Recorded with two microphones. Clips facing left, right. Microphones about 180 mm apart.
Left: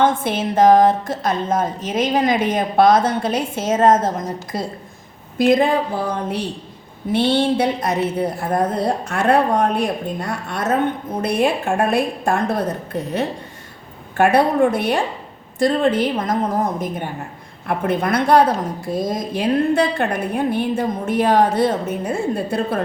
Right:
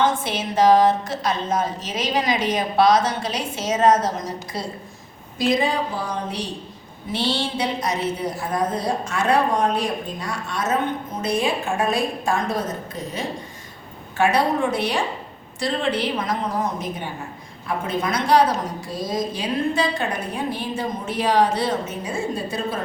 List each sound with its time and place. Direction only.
0.0 s a woman's voice: 55° left (ahead or behind)